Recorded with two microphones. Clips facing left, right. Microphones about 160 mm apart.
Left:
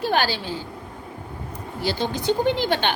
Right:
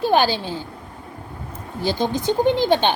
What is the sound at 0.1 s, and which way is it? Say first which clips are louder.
Speech: right 5 dB; 15° right (ahead or behind).